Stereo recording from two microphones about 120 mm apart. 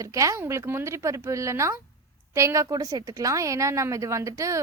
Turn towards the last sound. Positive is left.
turn(degrees=-25)  # may be behind; listen again after turning